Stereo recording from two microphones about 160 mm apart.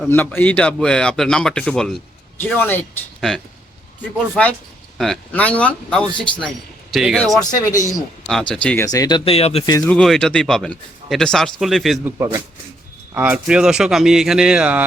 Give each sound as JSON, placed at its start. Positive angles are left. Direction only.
{"t": 0.1, "sound": "speech", "side_deg": 10}
{"t": 4.9, "sound": "speech", "side_deg": 5}
{"t": 7.3, "sound": "speech", "side_deg": 25}
{"t": 7.7, "sound": "a man's voice", "side_deg": 50}
{"t": 8.3, "sound": "speech", "side_deg": 5}
{"t": 8.8, "sound": "speech", "side_deg": 20}
{"t": 9.8, "sound": "speech", "side_deg": 5}
{"t": 12.0, "sound": "speech", "side_deg": -15}